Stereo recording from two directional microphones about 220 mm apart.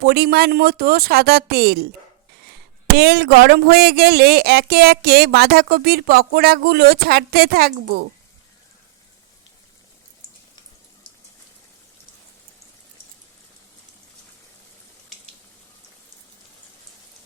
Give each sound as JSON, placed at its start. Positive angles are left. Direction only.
{"t": 0.0, "sound": "speech", "side_deg": -45}